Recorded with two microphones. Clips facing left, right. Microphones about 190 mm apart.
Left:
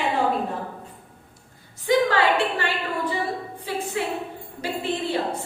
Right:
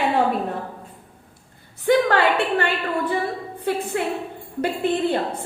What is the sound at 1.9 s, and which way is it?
Speech, 55° right (ahead or behind).